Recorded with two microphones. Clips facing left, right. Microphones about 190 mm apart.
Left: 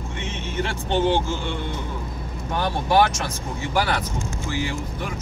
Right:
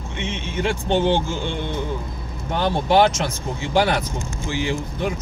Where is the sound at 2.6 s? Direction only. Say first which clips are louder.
Right 3 dB; 25° right (ahead or behind).